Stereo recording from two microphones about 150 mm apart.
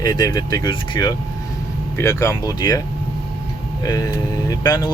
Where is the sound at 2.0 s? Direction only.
20° left (ahead or behind).